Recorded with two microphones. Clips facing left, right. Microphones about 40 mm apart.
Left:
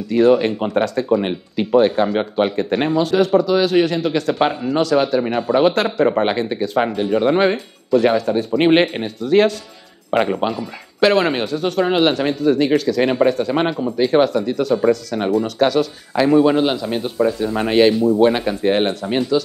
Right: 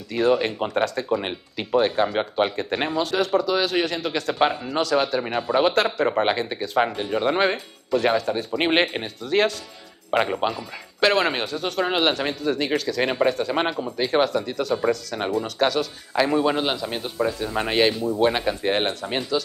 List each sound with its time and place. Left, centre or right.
0.1 s speech: centre